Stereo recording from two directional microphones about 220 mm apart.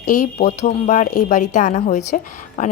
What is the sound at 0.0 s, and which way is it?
A woman's voice, 35° left (ahead or behind).